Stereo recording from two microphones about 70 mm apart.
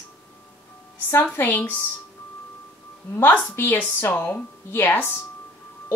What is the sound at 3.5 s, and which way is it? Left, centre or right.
A woman's voice, left.